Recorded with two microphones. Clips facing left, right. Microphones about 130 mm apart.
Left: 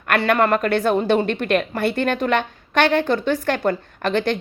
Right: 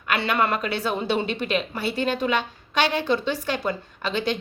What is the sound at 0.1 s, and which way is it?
Speech, 45° left (ahead or behind).